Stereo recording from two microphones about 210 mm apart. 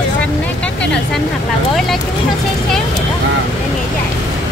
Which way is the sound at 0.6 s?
5° left (ahead or behind).